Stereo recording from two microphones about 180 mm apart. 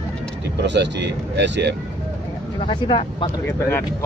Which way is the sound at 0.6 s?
70° right (ahead or behind).